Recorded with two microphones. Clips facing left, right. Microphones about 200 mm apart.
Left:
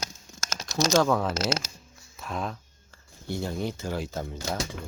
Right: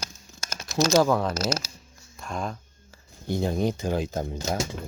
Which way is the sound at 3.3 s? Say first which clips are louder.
Right 5 dB; 20° right (ahead or behind).